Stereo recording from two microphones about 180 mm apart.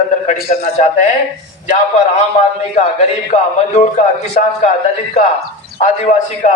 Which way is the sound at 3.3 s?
40° left (ahead or behind).